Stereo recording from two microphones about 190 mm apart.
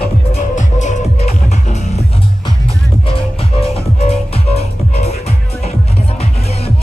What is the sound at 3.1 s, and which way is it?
Music, 30° left (ahead or behind).